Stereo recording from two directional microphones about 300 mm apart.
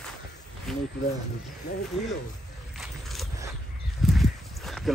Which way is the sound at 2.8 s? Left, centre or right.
Centre.